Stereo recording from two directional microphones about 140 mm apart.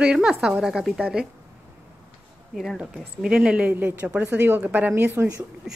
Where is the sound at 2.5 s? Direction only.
Centre (ahead or behind).